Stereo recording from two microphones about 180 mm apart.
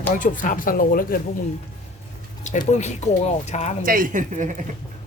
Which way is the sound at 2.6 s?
40° left (ahead or behind).